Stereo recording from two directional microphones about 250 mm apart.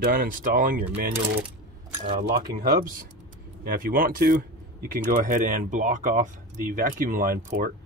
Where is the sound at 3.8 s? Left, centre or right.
Right.